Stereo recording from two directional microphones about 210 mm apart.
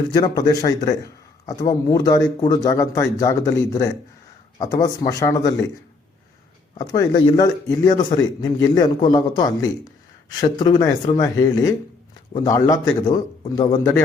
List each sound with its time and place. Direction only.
0.1 s speech: 20° left (ahead or behind)
6.7 s speech: 15° left (ahead or behind)